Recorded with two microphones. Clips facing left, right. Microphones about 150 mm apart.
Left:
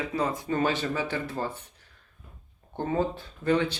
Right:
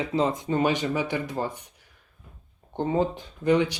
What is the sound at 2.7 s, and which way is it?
Speech, 20° right (ahead or behind).